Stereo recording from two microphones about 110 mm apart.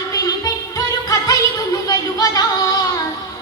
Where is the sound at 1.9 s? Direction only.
35° left (ahead or behind).